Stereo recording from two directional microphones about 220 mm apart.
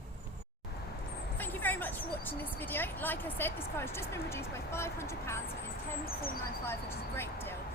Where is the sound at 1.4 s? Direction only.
10° left (ahead or behind).